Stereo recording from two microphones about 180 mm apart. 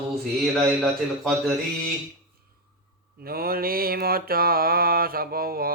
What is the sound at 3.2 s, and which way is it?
Mantra, 55° right (ahead or behind).